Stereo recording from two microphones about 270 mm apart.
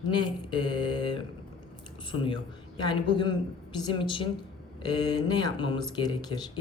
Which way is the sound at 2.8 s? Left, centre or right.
Centre.